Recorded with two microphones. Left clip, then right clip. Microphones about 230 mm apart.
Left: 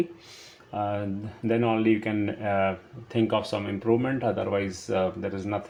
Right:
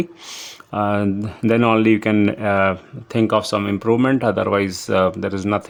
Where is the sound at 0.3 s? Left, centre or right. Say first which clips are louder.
Right 11 dB; right.